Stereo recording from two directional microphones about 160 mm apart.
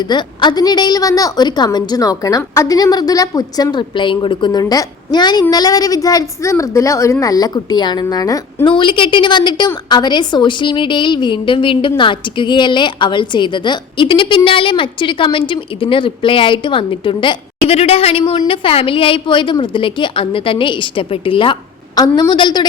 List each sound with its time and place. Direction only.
0.0 s a woman's voice: 30° left (ahead or behind)